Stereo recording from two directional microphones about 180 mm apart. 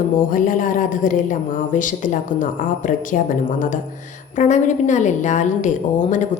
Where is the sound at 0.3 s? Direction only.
50° left (ahead or behind).